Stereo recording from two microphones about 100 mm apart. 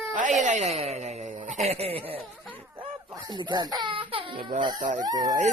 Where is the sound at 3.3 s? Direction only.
45° right (ahead or behind).